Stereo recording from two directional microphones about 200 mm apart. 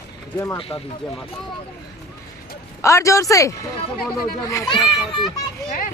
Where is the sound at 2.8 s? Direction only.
15° left (ahead or behind).